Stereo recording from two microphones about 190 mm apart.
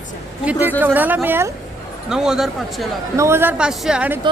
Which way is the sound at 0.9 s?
10° right (ahead or behind).